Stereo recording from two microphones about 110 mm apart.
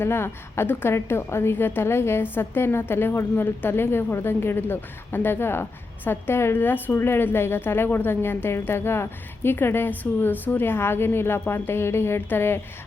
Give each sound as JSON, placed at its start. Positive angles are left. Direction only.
{"t": 0.0, "sound": "a woman's voice", "side_deg": 20}